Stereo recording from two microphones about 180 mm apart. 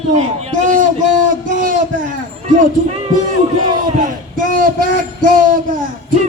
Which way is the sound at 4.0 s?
50° right (ahead or behind).